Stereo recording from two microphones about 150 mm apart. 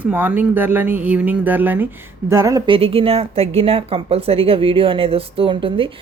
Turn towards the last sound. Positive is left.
turn(degrees=-35)  # may be behind; listen again after turning